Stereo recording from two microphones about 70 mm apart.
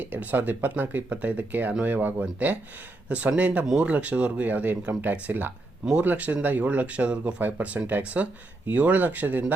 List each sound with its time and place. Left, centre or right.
0.0 s speech: right